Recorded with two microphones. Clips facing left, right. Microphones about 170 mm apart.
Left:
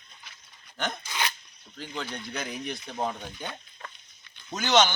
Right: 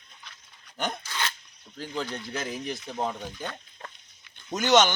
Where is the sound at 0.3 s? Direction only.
10° left (ahead or behind).